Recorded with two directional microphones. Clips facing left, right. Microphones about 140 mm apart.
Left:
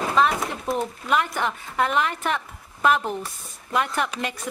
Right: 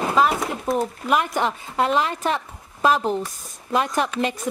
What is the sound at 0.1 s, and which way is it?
Speech, 5° right (ahead or behind).